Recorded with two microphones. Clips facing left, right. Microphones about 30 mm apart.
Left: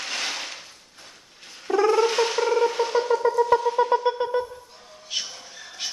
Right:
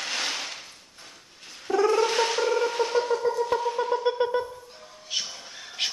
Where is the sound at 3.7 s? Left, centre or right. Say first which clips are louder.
Left 5 dB; left.